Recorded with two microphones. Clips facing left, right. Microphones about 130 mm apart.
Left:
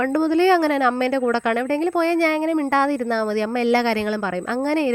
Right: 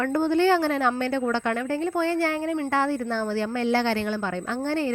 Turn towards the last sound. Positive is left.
turn(degrees=90)